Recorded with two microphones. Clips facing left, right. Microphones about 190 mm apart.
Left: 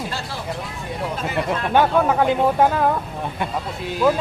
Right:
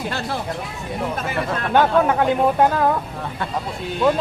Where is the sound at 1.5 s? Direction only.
15° left (ahead or behind).